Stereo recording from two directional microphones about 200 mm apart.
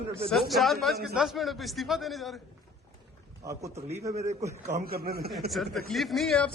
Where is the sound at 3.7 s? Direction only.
35° right (ahead or behind); by 5.3 s 50° right (ahead or behind).